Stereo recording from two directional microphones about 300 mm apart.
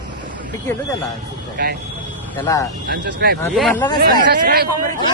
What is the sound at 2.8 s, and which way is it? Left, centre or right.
Speech, right.